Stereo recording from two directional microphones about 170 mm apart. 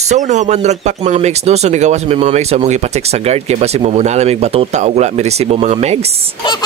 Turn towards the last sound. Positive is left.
turn(degrees=-40)  # may be behind; listen again after turning